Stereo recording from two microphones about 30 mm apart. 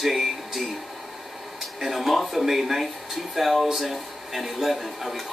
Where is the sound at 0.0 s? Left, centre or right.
Centre.